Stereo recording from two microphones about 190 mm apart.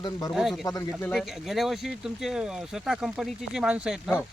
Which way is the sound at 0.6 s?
15° left (ahead or behind).